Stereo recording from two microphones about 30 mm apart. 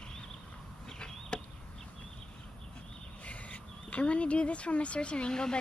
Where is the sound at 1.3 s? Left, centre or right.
Left.